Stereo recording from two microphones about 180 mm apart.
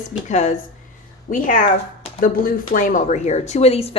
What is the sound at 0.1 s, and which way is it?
Speech, 40° left (ahead or behind).